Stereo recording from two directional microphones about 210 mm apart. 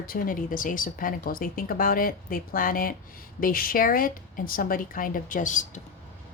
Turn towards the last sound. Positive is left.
turn(degrees=35)  # may be behind; listen again after turning